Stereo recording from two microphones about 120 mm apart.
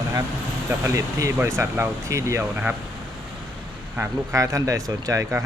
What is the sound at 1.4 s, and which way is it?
Speech, 20° right (ahead or behind).